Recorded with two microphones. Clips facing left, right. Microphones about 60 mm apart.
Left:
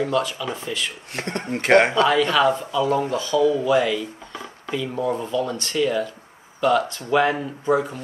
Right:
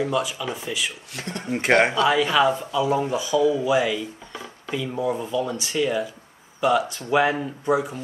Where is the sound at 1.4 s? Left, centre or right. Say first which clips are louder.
Left 2 dB; centre.